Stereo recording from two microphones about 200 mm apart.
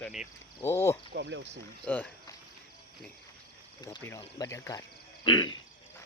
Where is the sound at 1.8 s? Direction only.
10° left (ahead or behind).